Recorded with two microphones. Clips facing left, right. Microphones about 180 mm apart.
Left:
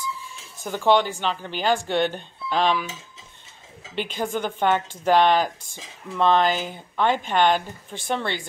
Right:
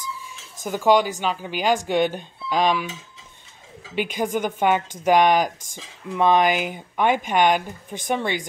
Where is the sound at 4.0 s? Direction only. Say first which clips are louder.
Right 3 dB; 10° right (ahead or behind).